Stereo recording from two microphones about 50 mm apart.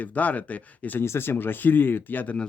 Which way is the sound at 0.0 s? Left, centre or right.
Left.